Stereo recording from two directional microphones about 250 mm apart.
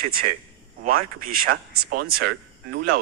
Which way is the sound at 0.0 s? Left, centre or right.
Right.